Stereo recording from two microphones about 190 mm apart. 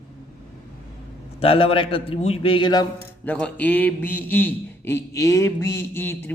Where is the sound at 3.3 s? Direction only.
5° left (ahead or behind).